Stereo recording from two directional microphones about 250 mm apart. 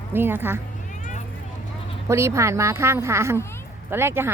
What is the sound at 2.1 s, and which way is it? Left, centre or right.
Speech, centre.